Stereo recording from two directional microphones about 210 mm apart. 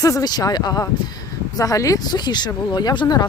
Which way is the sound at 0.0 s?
15° left (ahead or behind).